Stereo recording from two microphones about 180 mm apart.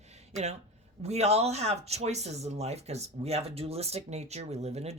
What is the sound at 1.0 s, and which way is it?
Speech, 35° right (ahead or behind).